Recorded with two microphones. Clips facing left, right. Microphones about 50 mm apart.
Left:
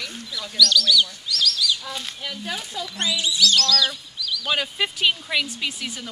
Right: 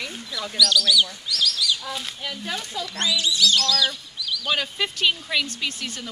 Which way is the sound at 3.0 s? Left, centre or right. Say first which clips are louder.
Right 1 dB; centre.